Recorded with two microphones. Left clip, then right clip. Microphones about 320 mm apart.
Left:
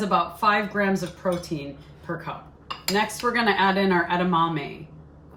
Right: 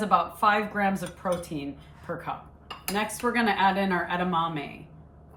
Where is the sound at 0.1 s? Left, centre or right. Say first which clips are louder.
Left 1 dB; centre.